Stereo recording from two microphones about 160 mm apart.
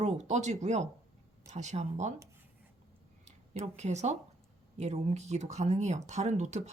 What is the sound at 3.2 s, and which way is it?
Speech, 45° right (ahead or behind).